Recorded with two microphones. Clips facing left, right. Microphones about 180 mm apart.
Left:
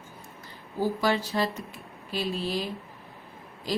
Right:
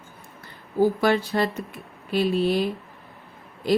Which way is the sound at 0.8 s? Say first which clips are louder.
Right 6 dB; 55° right (ahead or behind).